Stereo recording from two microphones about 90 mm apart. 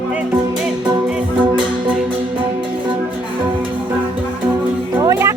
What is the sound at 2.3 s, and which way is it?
Music, 65° right (ahead or behind).